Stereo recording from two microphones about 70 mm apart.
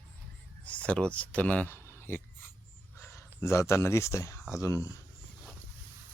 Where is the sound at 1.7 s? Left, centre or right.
Left.